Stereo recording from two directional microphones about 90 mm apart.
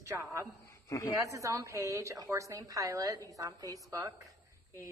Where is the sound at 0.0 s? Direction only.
35° right (ahead or behind).